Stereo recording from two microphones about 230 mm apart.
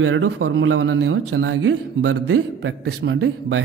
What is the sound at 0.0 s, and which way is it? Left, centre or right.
A man's voice, right.